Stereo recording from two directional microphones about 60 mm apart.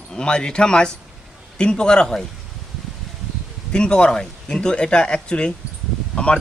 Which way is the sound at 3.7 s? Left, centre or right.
Centre.